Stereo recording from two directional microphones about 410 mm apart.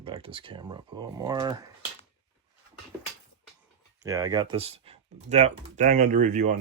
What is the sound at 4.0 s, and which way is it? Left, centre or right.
Speech, centre.